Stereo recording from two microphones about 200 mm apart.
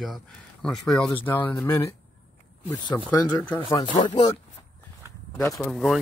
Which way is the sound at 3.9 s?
20° left (ahead or behind).